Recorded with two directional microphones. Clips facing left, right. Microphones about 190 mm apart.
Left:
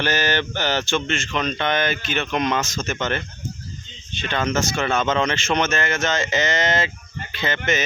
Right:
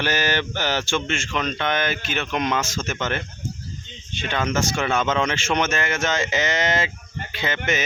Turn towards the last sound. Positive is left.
turn(degrees=-10)  # may be behind; listen again after turning